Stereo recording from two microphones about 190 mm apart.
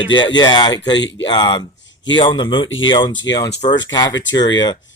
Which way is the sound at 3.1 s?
75° left (ahead or behind).